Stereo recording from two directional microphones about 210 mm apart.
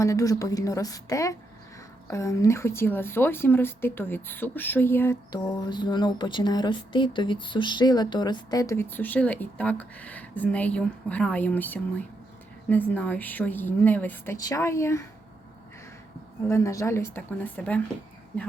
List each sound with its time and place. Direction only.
0.0 s speech: 15° left (ahead or behind)
16.5 s speech: 15° left (ahead or behind)